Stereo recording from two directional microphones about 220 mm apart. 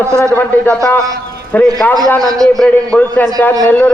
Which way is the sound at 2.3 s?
15° right (ahead or behind).